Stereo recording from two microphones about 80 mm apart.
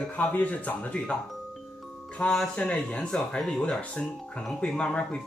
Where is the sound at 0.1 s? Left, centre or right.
Left.